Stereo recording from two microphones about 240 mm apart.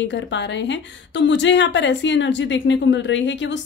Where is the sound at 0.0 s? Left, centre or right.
Left.